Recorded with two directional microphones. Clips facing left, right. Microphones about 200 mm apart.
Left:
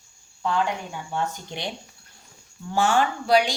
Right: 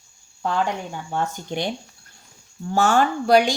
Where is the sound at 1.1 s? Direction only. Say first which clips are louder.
Right 3 dB; 50° right (ahead or behind).